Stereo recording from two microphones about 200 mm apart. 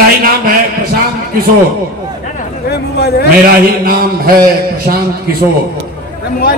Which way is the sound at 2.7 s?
55° left (ahead or behind).